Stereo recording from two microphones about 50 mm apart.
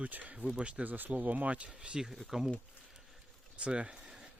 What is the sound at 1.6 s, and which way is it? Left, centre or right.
Speech, right.